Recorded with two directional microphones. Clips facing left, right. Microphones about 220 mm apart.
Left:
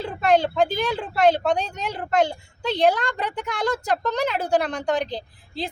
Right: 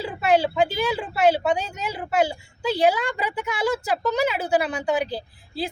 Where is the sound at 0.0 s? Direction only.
5° right (ahead or behind).